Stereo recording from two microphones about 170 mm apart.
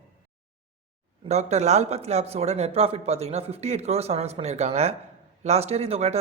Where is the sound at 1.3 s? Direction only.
40° right (ahead or behind).